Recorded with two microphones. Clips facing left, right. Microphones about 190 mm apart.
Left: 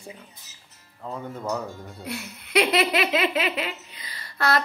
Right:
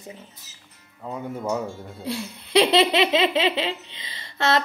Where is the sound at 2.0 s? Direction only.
30° right (ahead or behind).